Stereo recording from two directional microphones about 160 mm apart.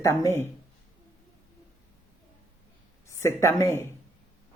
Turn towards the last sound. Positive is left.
turn(degrees=15)  # may be behind; listen again after turning